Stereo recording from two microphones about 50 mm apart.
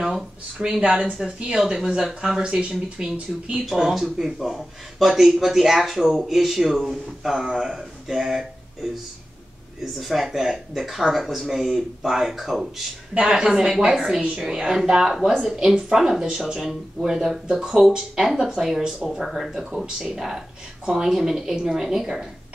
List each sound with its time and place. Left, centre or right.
0.0 s speech: centre
3.0 s speech: centre
3.6 s speech: centre
9.9 s speech: centre